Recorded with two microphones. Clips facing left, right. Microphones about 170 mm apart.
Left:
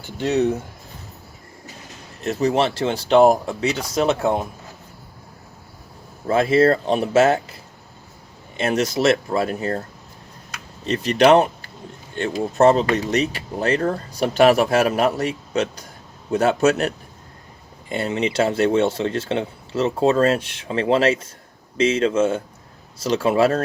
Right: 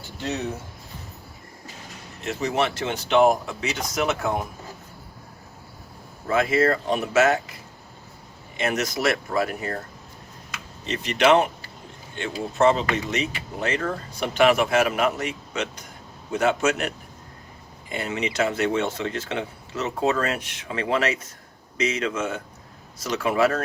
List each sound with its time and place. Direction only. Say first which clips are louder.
2.2 s speech: left 5 dB; 35° left (ahead or behind)
6.2 s speech: left 5 dB; 30° left (ahead or behind)
8.5 s speech: left 5 dB; 30° left (ahead or behind)